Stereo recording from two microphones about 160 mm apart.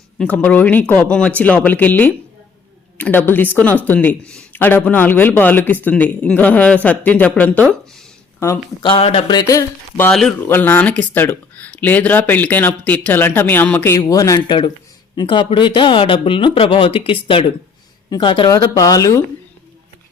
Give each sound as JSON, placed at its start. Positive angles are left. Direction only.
{"t": 0.2, "sound": "speech", "side_deg": 10}
{"t": 8.4, "sound": "speech", "side_deg": 15}
{"t": 8.8, "sound": "speech", "side_deg": 35}
{"t": 10.1, "sound": "speech", "side_deg": 5}
{"t": 11.1, "sound": "a sound", "side_deg": 10}
{"t": 11.8, "sound": "speech", "side_deg": 10}